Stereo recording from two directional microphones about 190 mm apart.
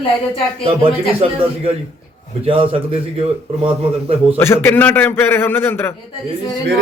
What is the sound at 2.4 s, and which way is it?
Speech, 30° right (ahead or behind).